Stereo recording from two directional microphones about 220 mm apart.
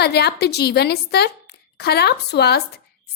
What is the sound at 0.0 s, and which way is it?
A woman's voice, 45° left (ahead or behind).